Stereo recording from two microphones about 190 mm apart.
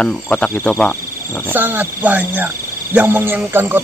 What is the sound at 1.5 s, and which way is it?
Speech, 10° right (ahead or behind).